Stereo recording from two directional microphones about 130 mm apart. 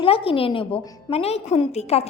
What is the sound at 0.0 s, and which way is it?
A woman's voice, 45° left (ahead or behind).